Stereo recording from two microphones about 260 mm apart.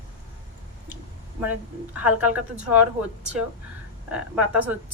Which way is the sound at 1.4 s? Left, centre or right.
Centre.